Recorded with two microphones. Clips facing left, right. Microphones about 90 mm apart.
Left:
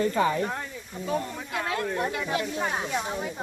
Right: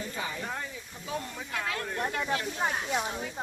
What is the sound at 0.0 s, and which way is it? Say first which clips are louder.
Speech: left 12 dB; 60° left (ahead or behind).